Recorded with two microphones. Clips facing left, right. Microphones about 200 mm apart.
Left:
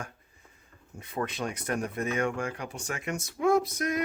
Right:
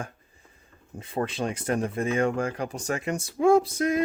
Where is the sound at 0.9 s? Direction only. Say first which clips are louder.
Right 4 dB; 30° right (ahead or behind).